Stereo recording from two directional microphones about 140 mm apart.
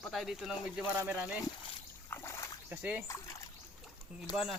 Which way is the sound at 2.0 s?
20° left (ahead or behind).